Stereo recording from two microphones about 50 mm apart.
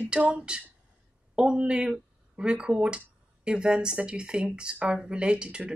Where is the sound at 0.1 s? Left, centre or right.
Right.